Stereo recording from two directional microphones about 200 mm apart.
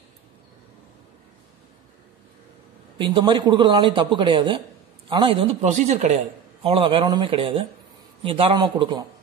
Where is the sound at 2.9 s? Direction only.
25° right (ahead or behind).